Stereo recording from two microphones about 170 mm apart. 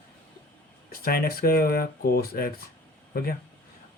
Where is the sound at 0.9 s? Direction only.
60° left (ahead or behind).